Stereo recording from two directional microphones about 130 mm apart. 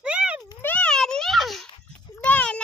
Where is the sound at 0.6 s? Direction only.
10° left (ahead or behind).